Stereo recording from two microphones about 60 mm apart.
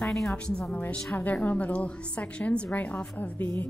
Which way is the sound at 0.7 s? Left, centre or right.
Left.